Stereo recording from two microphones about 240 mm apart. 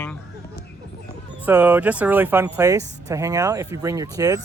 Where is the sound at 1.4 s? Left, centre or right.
Centre.